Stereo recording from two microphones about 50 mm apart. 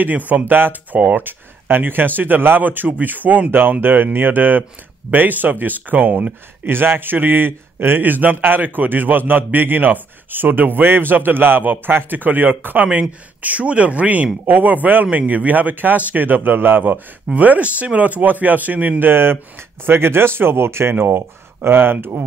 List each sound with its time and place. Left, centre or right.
0.3 s speech: right
6.7 s speech: right
13.4 s speech: right
17.3 s speech: right
20.9 s speech: right